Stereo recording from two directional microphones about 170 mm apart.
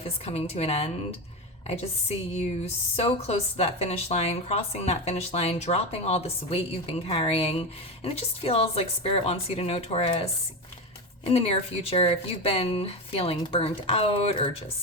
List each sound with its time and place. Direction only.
0.0 s speech: 35° left (ahead or behind)
11.3 s speech: 35° left (ahead or behind)